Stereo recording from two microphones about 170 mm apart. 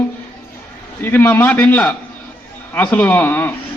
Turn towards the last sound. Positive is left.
turn(degrees=10)  # may be behind; listen again after turning